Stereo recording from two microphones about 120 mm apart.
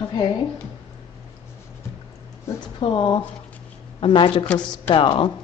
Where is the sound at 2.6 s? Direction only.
40° left (ahead or behind).